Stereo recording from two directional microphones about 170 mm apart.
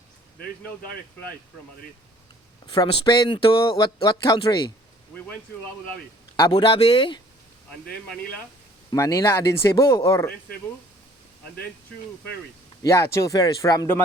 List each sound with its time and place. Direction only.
2.7 s speech: 25° left (ahead or behind)
6.3 s speech: 20° left (ahead or behind)
8.9 s speech: 20° left (ahead or behind)
12.8 s speech: 20° left (ahead or behind)